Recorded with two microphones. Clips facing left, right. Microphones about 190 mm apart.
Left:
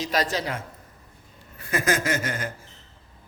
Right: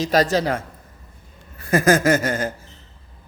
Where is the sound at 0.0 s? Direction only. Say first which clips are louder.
Right 7 dB; 40° right (ahead or behind).